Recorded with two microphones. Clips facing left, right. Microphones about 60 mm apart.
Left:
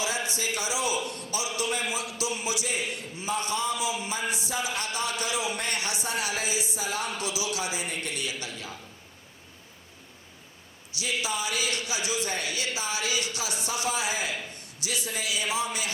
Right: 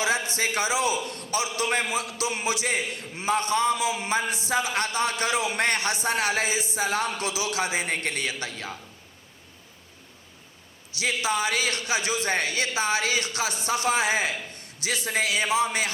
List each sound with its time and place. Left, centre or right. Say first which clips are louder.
0.3 s a man's voice: right 5 dB; right
10.9 s a man's voice: right 5 dB; right